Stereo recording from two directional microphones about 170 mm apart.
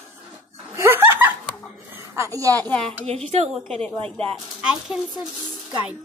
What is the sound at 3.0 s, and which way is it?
Speech, 40° right (ahead or behind).